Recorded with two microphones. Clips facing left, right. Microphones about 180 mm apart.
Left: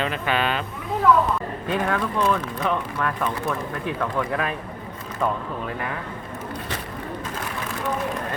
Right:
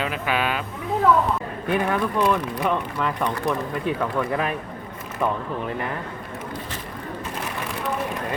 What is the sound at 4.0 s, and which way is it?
Speech, 5° right (ahead or behind).